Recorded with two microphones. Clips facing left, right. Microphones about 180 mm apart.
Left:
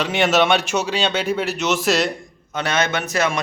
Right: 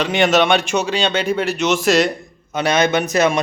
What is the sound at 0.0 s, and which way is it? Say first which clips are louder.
A man's voice: right 2 dB; 5° left (ahead or behind).